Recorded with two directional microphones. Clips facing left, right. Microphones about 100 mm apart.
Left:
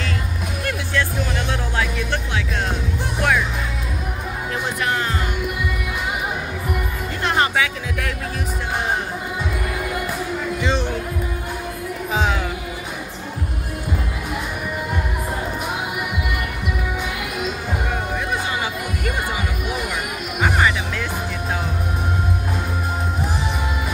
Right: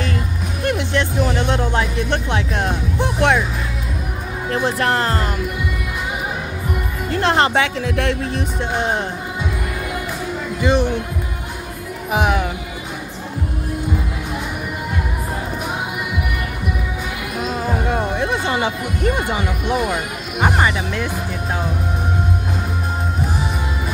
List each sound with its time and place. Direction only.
0.7 s speech: 20° right (ahead or behind)
4.5 s speech: 35° right (ahead or behind)
7.1 s speech: 35° right (ahead or behind)
10.6 s speech: 15° right (ahead or behind)
12.1 s speech: 15° right (ahead or behind)
18.1 s chatter: 30° right (ahead or behind)
19.7 s speech: 30° right (ahead or behind)